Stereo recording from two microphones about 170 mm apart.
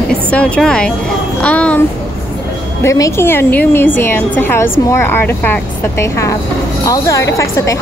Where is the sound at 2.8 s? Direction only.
20° left (ahead or behind).